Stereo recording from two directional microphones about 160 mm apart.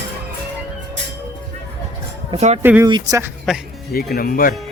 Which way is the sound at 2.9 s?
25° right (ahead or behind).